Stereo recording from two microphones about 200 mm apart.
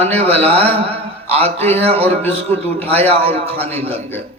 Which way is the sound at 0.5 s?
10° left (ahead or behind).